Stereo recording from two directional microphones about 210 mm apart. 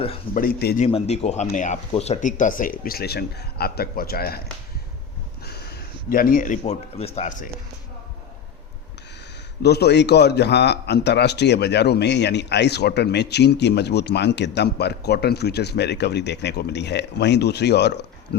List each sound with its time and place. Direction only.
0.3 s a man's voice: 45° left (ahead or behind)
0.9 s speech: 30° left (ahead or behind); by 4.4 s 45° left (ahead or behind)
5.4 s speech: 50° left (ahead or behind)
9.6 s a man's voice: 50° left (ahead or behind)